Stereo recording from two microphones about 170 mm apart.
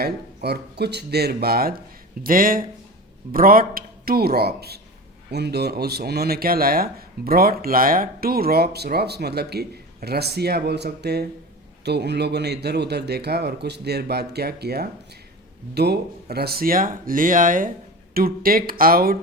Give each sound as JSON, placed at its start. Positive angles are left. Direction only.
{"t": 0.0, "sound": "speech", "side_deg": -75}